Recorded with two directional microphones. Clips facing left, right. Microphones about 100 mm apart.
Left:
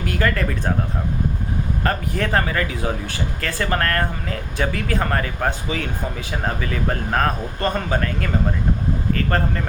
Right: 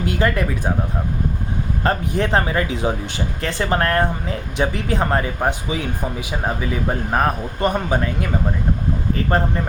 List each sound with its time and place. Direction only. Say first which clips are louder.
0.0 s speech: right 2 dB; 20° right (ahead or behind)
1.8 s speech: right 4 dB; 20° right (ahead or behind)